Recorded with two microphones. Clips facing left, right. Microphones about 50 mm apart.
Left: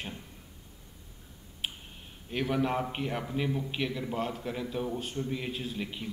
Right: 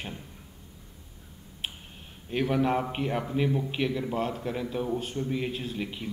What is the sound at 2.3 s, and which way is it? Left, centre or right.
Speech, centre.